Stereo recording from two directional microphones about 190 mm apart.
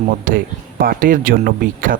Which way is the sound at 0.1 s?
50° right (ahead or behind).